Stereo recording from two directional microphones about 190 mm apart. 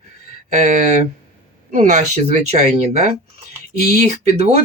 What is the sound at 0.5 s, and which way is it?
Speech, 35° right (ahead or behind).